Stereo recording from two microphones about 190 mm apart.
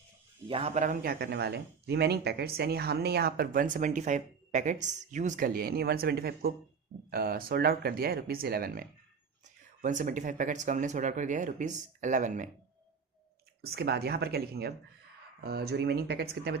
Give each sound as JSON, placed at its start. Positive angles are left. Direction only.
{"t": 0.4, "sound": "a man's voice", "side_deg": -30}
{"t": 13.6, "sound": "speech", "side_deg": -55}